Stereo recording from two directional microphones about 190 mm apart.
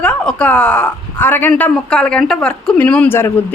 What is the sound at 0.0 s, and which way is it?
Speech, 5° left (ahead or behind).